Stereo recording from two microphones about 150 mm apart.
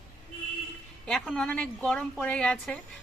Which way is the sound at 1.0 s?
Centre (ahead or behind).